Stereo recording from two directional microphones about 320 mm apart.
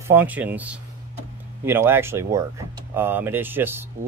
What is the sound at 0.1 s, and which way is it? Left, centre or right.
Speech, centre.